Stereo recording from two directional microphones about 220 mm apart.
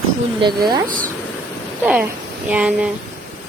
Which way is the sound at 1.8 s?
5° right (ahead or behind).